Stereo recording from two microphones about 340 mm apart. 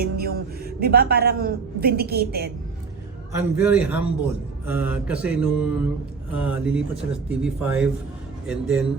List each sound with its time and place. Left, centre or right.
0.0 s a man's voice: right
3.6 s mantra: centre